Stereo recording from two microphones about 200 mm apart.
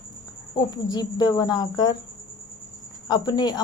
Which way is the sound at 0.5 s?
20° left (ahead or behind).